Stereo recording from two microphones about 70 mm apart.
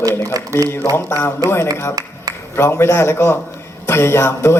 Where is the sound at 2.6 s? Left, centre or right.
Left.